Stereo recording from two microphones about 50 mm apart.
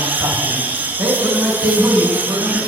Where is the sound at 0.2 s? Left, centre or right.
Right.